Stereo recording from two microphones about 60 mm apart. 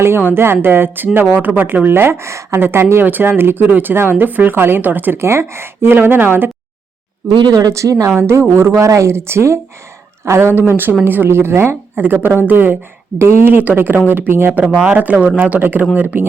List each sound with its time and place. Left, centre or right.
0.2 s speech: right
5.2 s speech: right
7.7 s a woman's voice: right
8.3 s speech: right
11.9 s speech: right
14.6 s speech: centre